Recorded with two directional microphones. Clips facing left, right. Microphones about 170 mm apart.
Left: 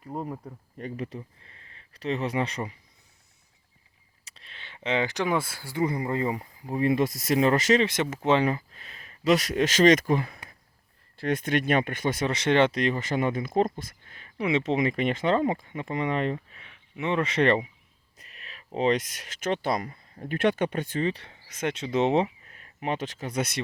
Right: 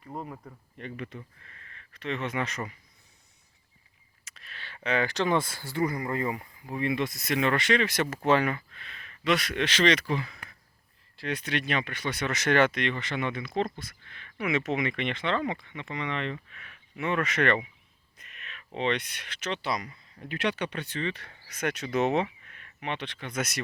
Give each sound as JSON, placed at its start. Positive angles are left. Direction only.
{"t": 0.1, "sound": "speech", "side_deg": 5}
{"t": 0.8, "sound": "speech", "side_deg": 40}
{"t": 4.4, "sound": "speech", "side_deg": 25}
{"t": 5.8, "sound": "speech", "side_deg": 25}
{"t": 8.0, "sound": "speech", "side_deg": 20}
{"t": 8.4, "sound": "speech", "side_deg": 35}
{"t": 12.3, "sound": "speech", "side_deg": 25}
{"t": 12.8, "sound": "speech", "side_deg": 40}
{"t": 16.6, "sound": "speech", "side_deg": 25}
{"t": 21.2, "sound": "speech", "side_deg": 20}